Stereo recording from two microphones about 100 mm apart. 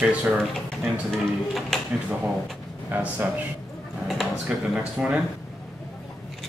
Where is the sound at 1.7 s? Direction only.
5° left (ahead or behind).